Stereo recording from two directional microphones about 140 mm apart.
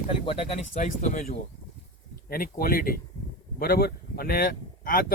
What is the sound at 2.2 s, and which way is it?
Speech, 90° left.